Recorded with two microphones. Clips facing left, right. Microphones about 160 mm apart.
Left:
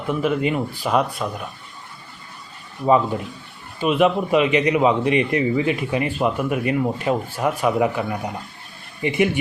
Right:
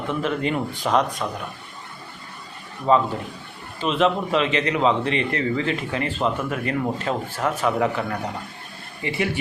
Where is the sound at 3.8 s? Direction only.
10° left (ahead or behind).